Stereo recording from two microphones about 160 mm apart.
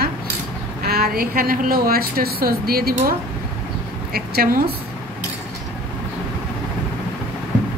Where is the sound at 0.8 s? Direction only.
70° right (ahead or behind).